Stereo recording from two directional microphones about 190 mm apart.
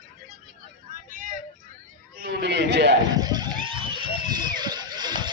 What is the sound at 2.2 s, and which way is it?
Chatter, 60° right (ahead or behind).